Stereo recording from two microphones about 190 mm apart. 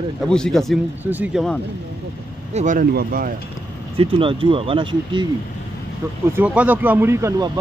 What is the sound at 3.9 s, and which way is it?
Speech, 30° right (ahead or behind).